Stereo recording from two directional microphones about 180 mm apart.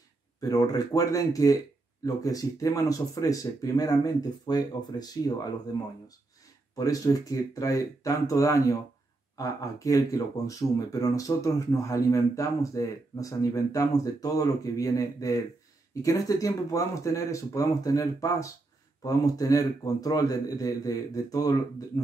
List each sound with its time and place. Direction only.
0.4 s speech: 20° left (ahead or behind)